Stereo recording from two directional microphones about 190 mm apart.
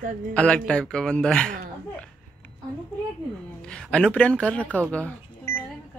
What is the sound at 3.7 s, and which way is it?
Speech, 5° left (ahead or behind).